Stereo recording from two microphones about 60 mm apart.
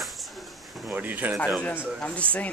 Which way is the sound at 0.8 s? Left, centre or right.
Right.